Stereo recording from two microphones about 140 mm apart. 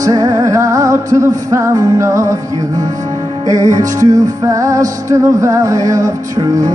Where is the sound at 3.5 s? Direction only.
25° right (ahead or behind).